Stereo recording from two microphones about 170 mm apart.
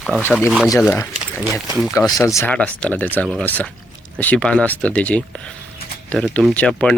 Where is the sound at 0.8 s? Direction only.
10° left (ahead or behind).